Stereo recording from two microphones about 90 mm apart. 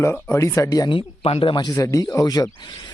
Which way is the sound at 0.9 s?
80° left.